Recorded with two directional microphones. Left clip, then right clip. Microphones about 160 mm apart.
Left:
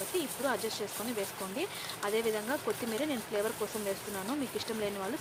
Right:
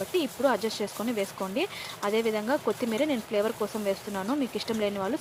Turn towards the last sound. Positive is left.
turn(degrees=-35)  # may be behind; listen again after turning